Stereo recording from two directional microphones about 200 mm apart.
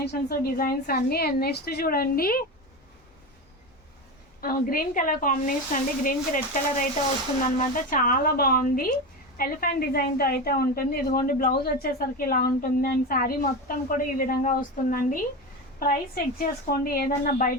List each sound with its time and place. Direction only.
0.0 s a woman's voice: 55° left (ahead or behind)
4.4 s speech: 45° left (ahead or behind)
7.9 s a woman's voice: 45° left (ahead or behind)